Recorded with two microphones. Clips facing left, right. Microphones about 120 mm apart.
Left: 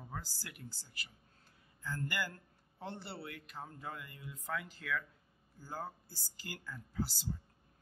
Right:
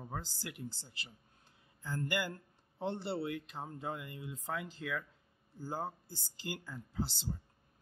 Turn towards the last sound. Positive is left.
turn(degrees=-25)  # may be behind; listen again after turning